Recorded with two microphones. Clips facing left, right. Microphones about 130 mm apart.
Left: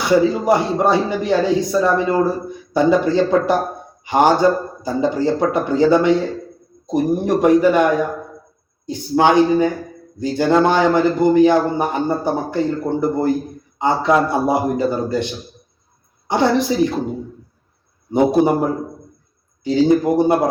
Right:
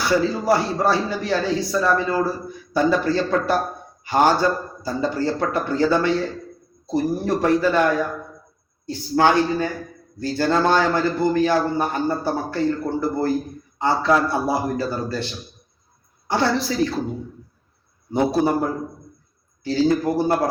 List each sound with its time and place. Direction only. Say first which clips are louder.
0.0 s a man's voice: left 5 dB; 20° left (ahead or behind)
18.1 s a man's voice: left 5 dB; 20° left (ahead or behind)